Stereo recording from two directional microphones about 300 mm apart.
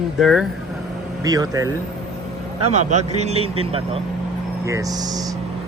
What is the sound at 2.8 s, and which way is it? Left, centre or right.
A man's voice, right.